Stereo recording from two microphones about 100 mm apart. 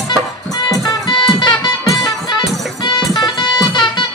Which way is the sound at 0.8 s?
55° left (ahead or behind).